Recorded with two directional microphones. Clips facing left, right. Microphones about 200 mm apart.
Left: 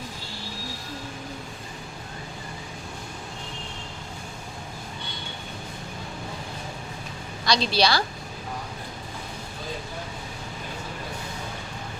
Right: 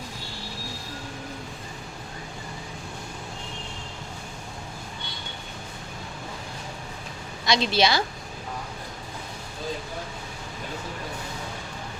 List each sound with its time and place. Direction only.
7.4 s a woman's voice: 20° right (ahead or behind)